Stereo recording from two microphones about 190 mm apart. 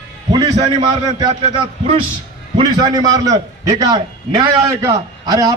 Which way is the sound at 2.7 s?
20° right (ahead or behind).